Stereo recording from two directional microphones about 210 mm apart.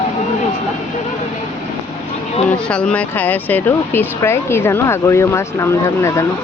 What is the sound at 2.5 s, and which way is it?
Speech, 5° left (ahead or behind).